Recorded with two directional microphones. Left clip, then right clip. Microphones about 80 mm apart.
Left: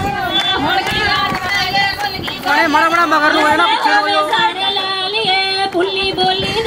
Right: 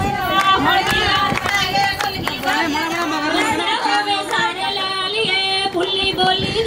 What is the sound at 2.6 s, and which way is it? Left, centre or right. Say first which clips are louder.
Chatter: left 8 dB; left.